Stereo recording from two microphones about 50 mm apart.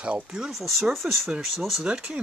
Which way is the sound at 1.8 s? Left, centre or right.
Right.